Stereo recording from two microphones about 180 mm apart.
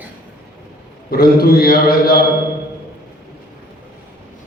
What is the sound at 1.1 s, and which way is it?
A man's voice, 55° left (ahead or behind).